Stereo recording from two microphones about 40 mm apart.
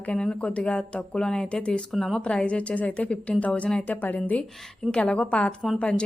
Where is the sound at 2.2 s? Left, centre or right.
Left.